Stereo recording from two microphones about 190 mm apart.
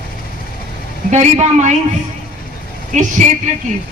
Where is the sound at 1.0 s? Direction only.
35° right (ahead or behind).